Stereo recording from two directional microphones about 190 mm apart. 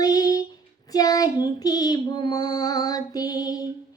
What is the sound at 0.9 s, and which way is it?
Child singing, 20° left (ahead or behind).